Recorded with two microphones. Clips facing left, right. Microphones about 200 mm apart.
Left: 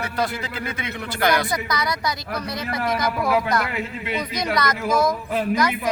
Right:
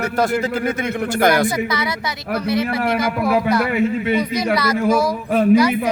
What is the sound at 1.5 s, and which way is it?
A woman's voice, 5° right (ahead or behind).